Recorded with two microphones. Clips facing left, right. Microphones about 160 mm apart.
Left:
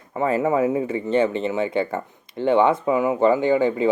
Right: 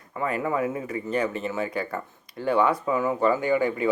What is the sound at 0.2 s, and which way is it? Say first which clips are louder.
Speech: left 6 dB; 25° left (ahead or behind).